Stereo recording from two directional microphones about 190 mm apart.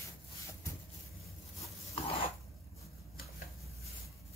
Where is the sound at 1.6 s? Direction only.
30° left (ahead or behind).